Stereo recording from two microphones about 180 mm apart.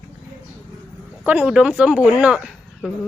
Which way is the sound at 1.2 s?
10° right (ahead or behind).